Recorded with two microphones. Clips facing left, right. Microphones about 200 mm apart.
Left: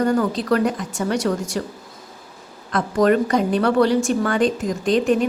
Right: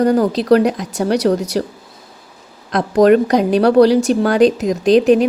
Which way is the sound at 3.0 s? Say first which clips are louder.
Right 5 dB; 75° right (ahead or behind).